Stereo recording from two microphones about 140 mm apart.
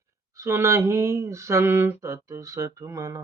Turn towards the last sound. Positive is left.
turn(degrees=-20)  # may be behind; listen again after turning